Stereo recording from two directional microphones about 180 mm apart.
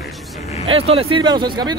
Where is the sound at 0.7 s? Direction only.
30° right (ahead or behind).